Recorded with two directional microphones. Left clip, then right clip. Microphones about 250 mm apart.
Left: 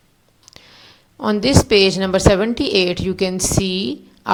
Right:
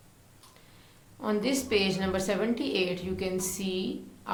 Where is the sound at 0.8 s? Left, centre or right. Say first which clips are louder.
Left 13 dB; left.